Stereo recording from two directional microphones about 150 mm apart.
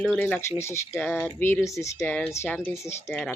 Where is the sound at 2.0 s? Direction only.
10° left (ahead or behind).